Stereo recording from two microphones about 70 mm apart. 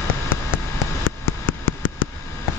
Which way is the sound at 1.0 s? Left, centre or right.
Left.